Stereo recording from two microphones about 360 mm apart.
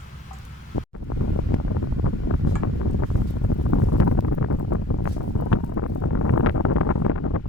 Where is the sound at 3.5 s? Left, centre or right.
Left.